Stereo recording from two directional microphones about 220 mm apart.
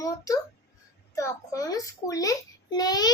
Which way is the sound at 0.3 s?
15° left (ahead or behind).